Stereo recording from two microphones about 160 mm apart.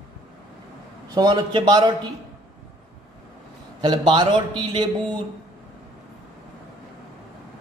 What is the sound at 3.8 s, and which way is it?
Speech, 25° right (ahead or behind).